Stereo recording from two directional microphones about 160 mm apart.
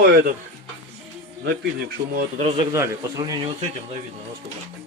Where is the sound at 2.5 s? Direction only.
20° right (ahead or behind).